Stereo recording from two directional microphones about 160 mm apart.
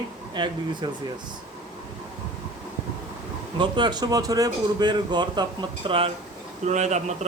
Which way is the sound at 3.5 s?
30° right (ahead or behind).